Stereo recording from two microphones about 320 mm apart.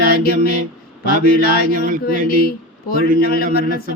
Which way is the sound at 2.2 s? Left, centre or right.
Left.